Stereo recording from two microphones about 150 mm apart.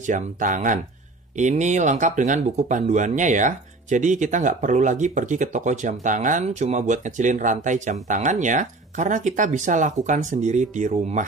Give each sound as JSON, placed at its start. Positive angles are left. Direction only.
{"t": 0.0, "sound": "speech", "side_deg": -60}